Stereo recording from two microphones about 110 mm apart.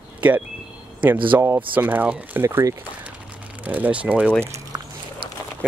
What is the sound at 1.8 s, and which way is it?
Speech, 15° right (ahead or behind).